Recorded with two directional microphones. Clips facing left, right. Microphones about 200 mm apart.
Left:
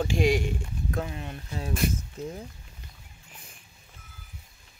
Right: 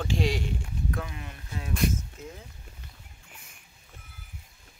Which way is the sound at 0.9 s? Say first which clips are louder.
Left 4 dB; 30° left (ahead or behind).